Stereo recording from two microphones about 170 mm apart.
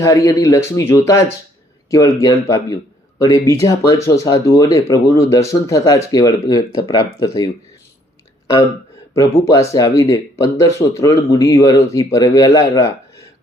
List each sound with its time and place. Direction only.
0.0 s speech: 20° left (ahead or behind)
9.1 s speech: 20° left (ahead or behind)